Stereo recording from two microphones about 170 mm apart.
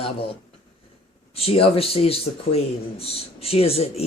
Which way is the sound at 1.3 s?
35° left (ahead or behind).